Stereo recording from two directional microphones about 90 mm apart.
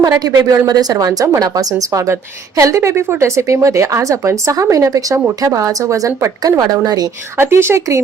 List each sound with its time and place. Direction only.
0.0 s a woman's voice: 45° right (ahead or behind)
6.6 s a woman's voice: 50° right (ahead or behind)
7.3 s speech: 30° right (ahead or behind)